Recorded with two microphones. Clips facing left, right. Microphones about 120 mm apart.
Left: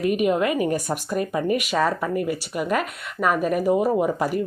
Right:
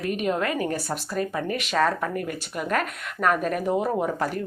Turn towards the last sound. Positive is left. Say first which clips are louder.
# left 4 dB
turn(degrees=10)  # may be behind; listen again after turning